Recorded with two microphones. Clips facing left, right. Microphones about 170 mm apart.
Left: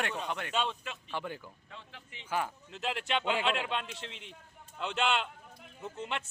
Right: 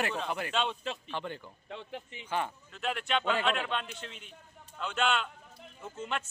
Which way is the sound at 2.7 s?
25° left (ahead or behind).